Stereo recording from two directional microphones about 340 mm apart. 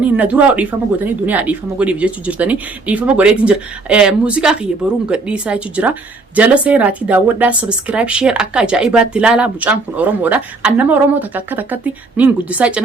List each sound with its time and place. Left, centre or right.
0.2 s speech: centre